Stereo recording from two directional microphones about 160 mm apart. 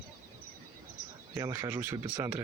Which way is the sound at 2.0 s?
25° right (ahead or behind).